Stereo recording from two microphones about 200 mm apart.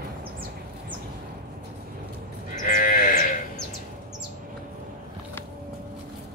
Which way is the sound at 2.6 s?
40° left (ahead or behind).